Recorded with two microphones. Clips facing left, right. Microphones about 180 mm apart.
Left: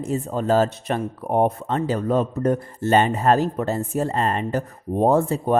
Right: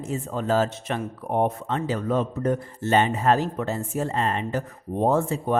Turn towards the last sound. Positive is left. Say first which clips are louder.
# left 4 dB
turn(degrees=40)  # may be behind; listen again after turning